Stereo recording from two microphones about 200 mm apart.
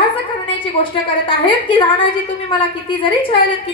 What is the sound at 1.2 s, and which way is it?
A child's voice, 25° left (ahead or behind).